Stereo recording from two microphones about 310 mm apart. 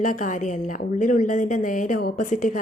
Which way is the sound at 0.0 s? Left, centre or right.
Left.